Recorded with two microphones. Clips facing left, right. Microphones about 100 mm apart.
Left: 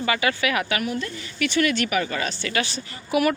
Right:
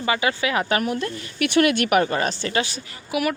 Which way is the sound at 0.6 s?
40° right (ahead or behind).